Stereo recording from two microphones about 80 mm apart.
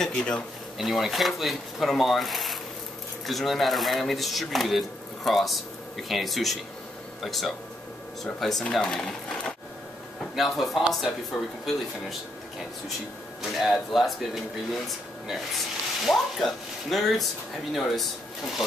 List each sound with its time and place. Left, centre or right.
0.0 s speech: centre
0.7 s speech: centre
10.3 s speech: centre
13.4 s speech: centre